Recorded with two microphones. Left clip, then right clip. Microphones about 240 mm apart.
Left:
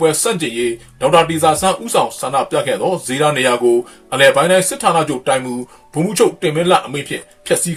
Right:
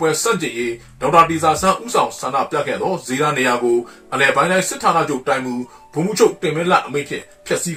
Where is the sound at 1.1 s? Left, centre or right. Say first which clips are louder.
Even; left.